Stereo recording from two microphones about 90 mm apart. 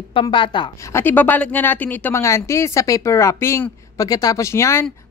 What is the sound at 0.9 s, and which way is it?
A woman's voice, 25° left (ahead or behind).